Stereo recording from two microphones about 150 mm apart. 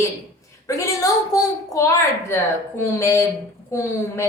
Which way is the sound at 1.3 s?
20° left (ahead or behind).